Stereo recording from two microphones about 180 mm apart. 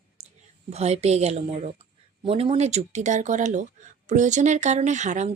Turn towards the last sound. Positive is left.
turn(degrees=-40)  # may be behind; listen again after turning